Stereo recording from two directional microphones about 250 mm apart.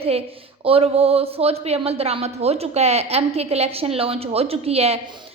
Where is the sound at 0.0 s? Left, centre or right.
Right.